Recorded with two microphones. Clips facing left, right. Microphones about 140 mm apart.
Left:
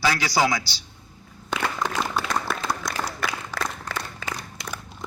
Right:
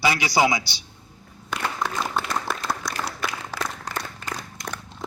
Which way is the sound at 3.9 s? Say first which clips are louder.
Even; 90° right.